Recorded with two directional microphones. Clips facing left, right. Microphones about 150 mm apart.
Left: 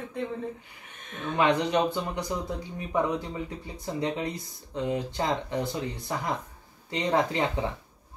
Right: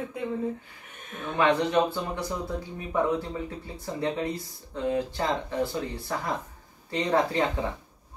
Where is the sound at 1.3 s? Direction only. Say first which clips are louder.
Right 1 dB; 15° left (ahead or behind).